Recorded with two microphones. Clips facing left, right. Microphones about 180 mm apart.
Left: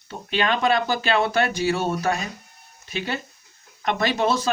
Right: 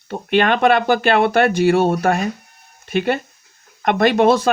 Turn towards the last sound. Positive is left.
turn(degrees=-60)  # may be behind; listen again after turning